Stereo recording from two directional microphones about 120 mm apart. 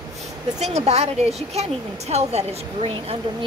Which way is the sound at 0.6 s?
65° right (ahead or behind).